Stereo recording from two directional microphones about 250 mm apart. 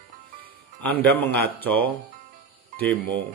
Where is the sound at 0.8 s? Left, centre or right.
Centre.